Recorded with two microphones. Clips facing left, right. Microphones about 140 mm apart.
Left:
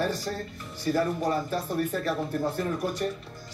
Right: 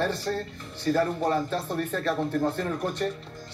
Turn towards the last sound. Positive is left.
turn(degrees=10)  # may be behind; listen again after turning